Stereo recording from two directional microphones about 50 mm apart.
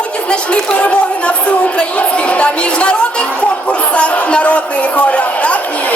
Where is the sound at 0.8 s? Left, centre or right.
Left.